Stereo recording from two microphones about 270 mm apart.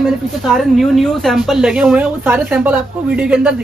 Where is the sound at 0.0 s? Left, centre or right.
Centre.